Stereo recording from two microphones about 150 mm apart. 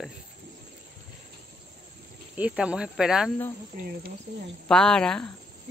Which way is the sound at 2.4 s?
5° right (ahead or behind).